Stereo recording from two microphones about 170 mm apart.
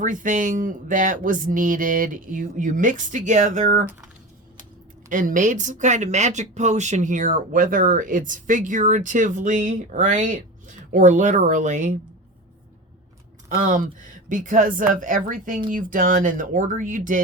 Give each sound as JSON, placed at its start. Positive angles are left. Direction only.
{"t": 0.0, "sound": "speech", "side_deg": -50}
{"t": 5.0, "sound": "speech", "side_deg": -50}
{"t": 13.6, "sound": "speech", "side_deg": -50}